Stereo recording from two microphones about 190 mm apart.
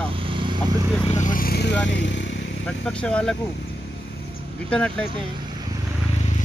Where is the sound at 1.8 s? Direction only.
70° left (ahead or behind).